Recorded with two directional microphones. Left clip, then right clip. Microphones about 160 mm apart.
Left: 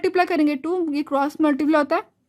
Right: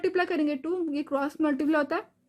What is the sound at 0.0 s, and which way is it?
A woman's voice, 35° left (ahead or behind).